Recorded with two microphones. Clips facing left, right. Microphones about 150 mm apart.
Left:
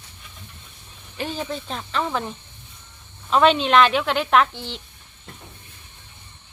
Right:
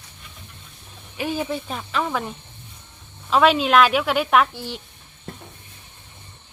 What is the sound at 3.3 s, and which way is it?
A woman's voice, 5° right (ahead or behind).